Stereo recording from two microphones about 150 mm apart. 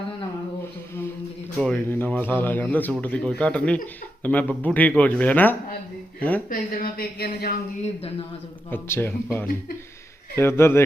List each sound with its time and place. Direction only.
1.6 s a man's voice: 10° left (ahead or behind)
6.5 s speech: 70° left (ahead or behind)
8.7 s a man's voice: 15° left (ahead or behind)